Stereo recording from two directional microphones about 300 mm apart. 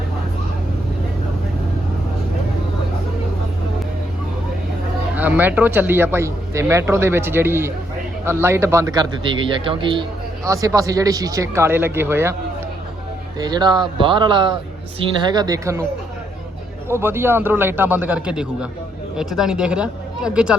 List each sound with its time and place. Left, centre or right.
5.1 s a man's voice: centre
13.4 s a man's voice: centre
16.9 s a man's voice: centre